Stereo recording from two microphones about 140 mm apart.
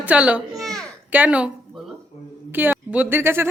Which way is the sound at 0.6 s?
5° left (ahead or behind).